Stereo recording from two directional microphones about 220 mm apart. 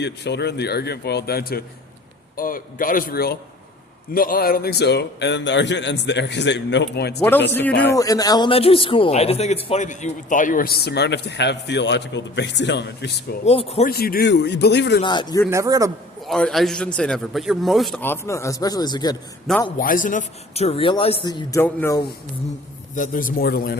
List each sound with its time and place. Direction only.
0.0 s a man's voice: 50° left (ahead or behind)
7.2 s a man's voice: 10° left (ahead or behind); by 13.1 s 50° left (ahead or behind)
13.4 s a man's voice: 30° left (ahead or behind)
13.9 s a man's voice: 45° left (ahead or behind)
15.0 s a man's voice: 20° left (ahead or behind)
15.4 s a man's voice: 15° right (ahead or behind)
16.2 s a man's voice: centre (ahead or behind); by 19.1 s 20° left (ahead or behind)
19.5 s a man's voice: centre (ahead or behind)
19.8 s a man's voice: 40° left (ahead or behind); by 22.1 s 15° left (ahead or behind)
23.0 s a man's voice: 35° left (ahead or behind)